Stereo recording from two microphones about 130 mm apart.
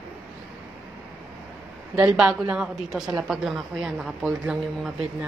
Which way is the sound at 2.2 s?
5° right (ahead or behind).